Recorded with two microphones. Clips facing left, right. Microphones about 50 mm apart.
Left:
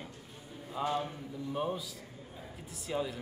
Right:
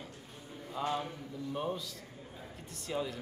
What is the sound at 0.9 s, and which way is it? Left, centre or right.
Speech, centre.